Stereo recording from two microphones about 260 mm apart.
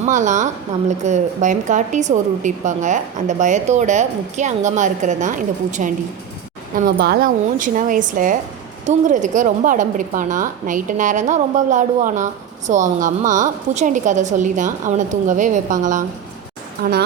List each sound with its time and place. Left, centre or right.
0.0 s a woman's voice: right
7.0 s a woman's voice: right